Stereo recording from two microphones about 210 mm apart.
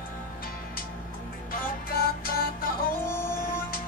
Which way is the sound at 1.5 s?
45° left (ahead or behind).